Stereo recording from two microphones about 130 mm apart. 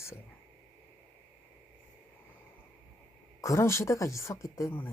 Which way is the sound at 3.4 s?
25° left (ahead or behind).